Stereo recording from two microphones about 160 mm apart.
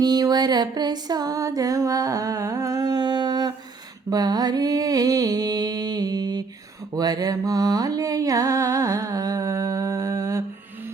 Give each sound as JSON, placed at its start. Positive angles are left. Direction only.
{"t": 0.0, "sound": "music", "side_deg": -25}